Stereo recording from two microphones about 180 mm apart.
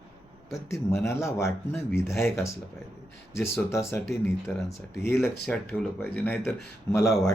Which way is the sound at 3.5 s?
15° left (ahead or behind).